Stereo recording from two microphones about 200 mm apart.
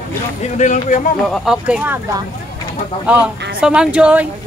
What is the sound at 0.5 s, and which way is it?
Speech, 40° left (ahead or behind).